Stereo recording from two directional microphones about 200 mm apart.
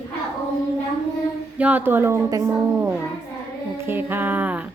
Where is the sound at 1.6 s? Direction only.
10° right (ahead or behind).